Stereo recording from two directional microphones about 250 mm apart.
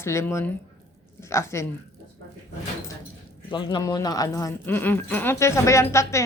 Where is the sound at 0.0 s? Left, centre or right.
Centre.